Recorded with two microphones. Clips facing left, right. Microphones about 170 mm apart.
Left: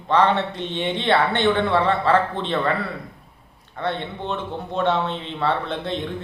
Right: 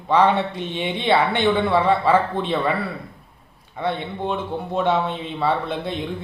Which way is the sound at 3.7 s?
10° right (ahead or behind).